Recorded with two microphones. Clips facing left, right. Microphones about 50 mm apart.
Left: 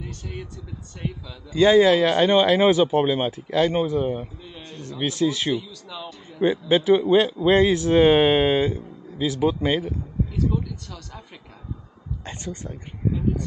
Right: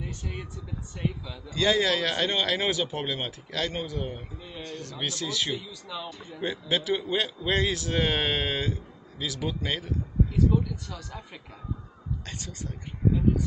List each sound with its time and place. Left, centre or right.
1.0 s speech: centre
1.5 s speech: left
5.6 s speech: centre
6.4 s speech: left
10.3 s speech: centre